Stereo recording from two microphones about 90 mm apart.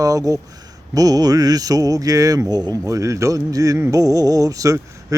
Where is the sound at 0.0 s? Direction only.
40° right (ahead or behind).